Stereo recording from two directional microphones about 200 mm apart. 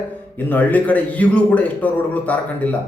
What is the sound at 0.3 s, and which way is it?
Speech, 10° left (ahead or behind).